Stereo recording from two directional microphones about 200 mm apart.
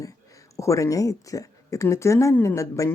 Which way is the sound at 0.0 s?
15° left (ahead or behind).